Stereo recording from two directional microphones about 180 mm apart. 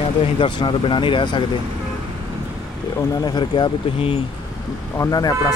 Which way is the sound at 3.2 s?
25° left (ahead or behind).